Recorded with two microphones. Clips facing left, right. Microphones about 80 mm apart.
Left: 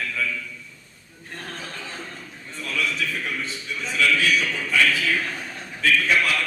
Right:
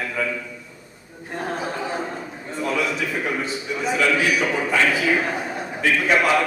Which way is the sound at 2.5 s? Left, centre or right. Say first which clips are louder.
Right 5 dB; centre.